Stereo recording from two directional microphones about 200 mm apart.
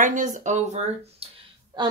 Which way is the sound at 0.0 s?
40° right (ahead or behind).